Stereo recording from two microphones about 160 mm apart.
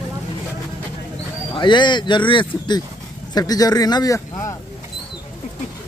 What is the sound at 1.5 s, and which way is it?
Speech, 30° left (ahead or behind).